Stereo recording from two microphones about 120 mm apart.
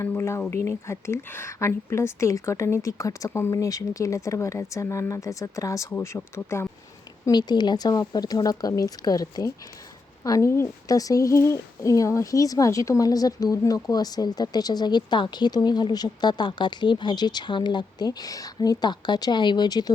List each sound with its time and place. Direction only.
0.0 s a woman's voice: 20° left (ahead or behind)
7.3 s a woman's voice: 35° left (ahead or behind)